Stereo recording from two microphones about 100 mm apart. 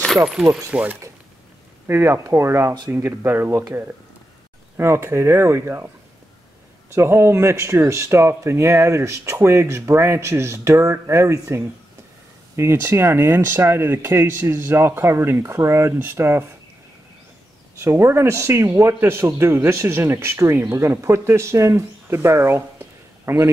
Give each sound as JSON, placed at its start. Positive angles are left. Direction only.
{"t": 0.2, "sound": "speech", "side_deg": -15}
{"t": 1.9, "sound": "speech", "side_deg": -25}
{"t": 6.9, "sound": "speech", "side_deg": -25}
{"t": 17.7, "sound": "speech", "side_deg": -25}